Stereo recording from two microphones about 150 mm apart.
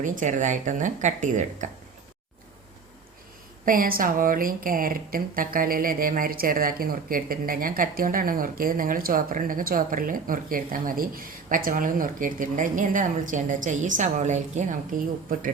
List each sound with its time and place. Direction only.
0.0 s speech: 60° right (ahead or behind)
3.7 s speech: 70° right (ahead or behind); by 14.8 s 50° right (ahead or behind)
15.3 s speech: 65° right (ahead or behind)